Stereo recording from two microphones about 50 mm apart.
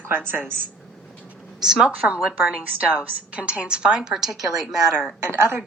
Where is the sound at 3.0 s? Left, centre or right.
Right; by 5.1 s centre.